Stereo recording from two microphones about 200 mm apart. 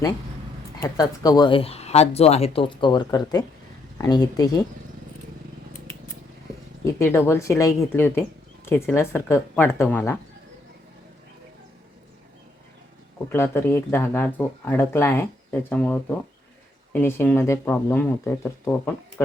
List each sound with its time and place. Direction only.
0.8 s speech: 15° left (ahead or behind)
7.3 s speech: 15° left (ahead or behind)
13.2 s speech: 10° left (ahead or behind)